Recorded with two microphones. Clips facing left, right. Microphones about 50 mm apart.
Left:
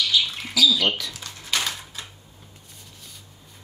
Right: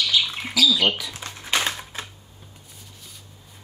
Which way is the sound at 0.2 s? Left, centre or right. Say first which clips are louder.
Even; right.